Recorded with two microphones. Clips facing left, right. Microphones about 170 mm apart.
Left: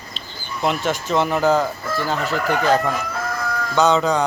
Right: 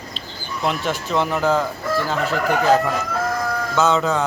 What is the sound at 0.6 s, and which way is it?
Speech, centre (ahead or behind).